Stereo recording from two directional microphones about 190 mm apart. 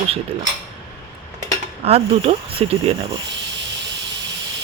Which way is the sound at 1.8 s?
30° right (ahead or behind).